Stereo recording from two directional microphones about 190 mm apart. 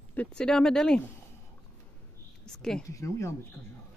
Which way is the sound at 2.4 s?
Centre (ahead or behind).